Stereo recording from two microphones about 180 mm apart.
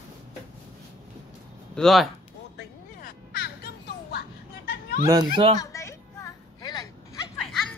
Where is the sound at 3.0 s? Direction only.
60° left (ahead or behind).